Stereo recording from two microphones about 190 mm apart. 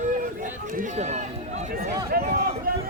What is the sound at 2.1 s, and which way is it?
Speech, 50° right (ahead or behind).